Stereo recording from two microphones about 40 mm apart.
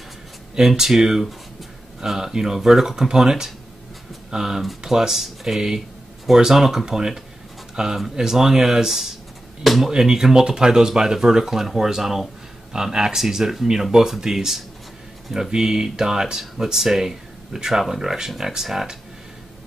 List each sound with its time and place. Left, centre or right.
0.6 s speech: centre
9.8 s speech: centre